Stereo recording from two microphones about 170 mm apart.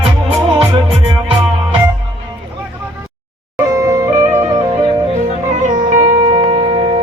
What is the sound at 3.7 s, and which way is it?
Music, 20° right (ahead or behind).